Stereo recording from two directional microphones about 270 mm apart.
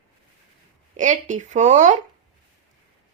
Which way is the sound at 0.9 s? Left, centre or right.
Right.